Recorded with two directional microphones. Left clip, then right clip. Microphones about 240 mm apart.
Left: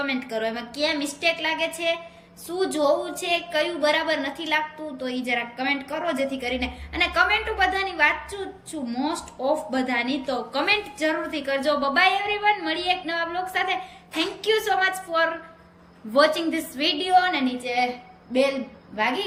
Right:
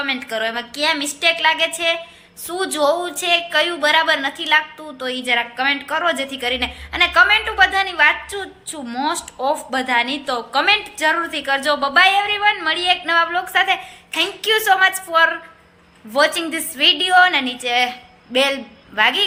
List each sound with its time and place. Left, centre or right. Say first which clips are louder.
0.0 s a woman's voice: right 5 dB; centre